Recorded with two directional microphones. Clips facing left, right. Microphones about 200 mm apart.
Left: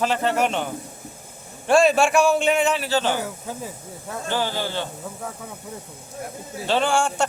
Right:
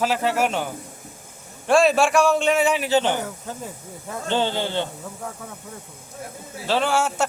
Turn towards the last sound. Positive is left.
turn(degrees=-5)  # may be behind; listen again after turning